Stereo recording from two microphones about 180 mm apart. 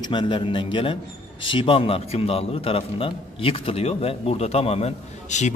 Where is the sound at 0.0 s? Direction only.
25° left (ahead or behind).